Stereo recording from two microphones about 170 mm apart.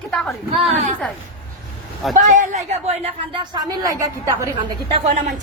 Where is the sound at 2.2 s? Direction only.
50° right (ahead or behind).